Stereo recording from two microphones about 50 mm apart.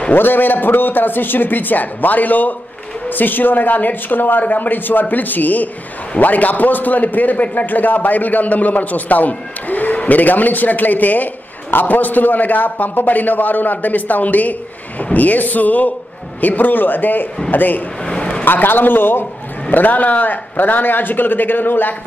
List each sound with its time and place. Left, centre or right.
0.1 s a man's voice: left
18.0 s a sound: centre
18.4 s a man's voice: left